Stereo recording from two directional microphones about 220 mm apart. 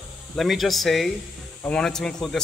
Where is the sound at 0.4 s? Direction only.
Centre (ahead or behind).